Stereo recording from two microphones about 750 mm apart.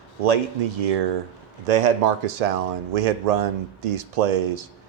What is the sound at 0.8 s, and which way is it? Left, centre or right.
Speech, right.